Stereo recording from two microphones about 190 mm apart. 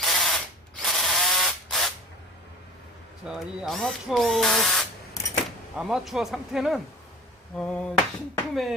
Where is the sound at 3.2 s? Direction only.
Centre (ahead or behind).